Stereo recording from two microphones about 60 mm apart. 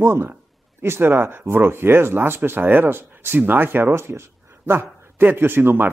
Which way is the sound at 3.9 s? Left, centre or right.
Right.